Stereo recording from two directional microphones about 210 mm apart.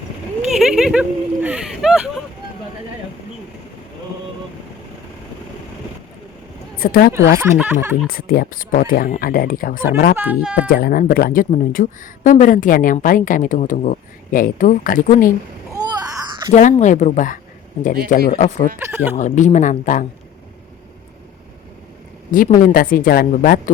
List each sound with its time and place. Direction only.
0.5 s speech: centre (ahead or behind)
6.7 s speech: 45° left (ahead or behind)
7.3 s speech: 10° right (ahead or behind)
8.0 s speech: 45° left (ahead or behind)
10.2 s speech: 5° right (ahead or behind)
10.7 s speech: 45° left (ahead or behind)
15.7 s a sound: 15° right (ahead or behind)
16.6 s speech: 35° left (ahead or behind)
18.8 s speech: 10° right (ahead or behind)
19.1 s speech: 35° left (ahead or behind)
22.3 s speech: 40° left (ahead or behind)